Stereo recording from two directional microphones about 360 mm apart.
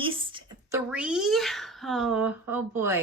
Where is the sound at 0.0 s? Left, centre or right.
Centre.